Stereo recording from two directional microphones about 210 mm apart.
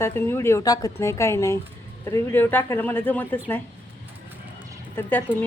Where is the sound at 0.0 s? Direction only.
10° left (ahead or behind).